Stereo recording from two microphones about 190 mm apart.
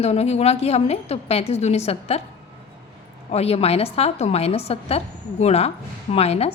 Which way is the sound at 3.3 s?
35° left (ahead or behind).